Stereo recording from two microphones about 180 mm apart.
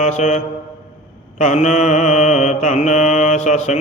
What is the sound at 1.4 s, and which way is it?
Mantra, 40° left (ahead or behind).